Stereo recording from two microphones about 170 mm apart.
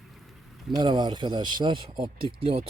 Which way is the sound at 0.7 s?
25° right (ahead or behind).